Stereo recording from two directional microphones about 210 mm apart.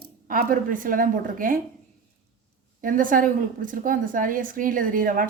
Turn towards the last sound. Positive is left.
turn(degrees=-40)  # may be behind; listen again after turning